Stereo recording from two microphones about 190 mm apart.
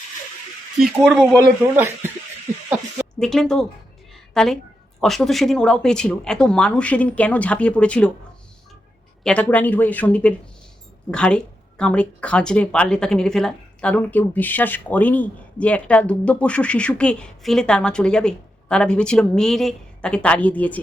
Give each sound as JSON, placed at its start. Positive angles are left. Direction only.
{"t": 0.8, "sound": "speech", "side_deg": 0}
{"t": 3.2, "sound": "speech", "side_deg": 5}
{"t": 4.1, "sound": "a sound", "side_deg": 0}
{"t": 4.9, "sound": "speech", "side_deg": 0}
{"t": 9.2, "sound": "speech", "side_deg": 5}